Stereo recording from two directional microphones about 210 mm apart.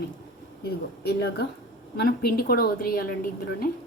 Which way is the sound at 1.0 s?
50° left (ahead or behind).